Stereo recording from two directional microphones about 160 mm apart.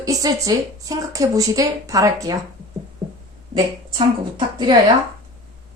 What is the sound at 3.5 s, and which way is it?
Speech, 30° right (ahead or behind).